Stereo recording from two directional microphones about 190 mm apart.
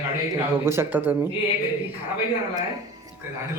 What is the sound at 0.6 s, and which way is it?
Speech, 15° right (ahead or behind).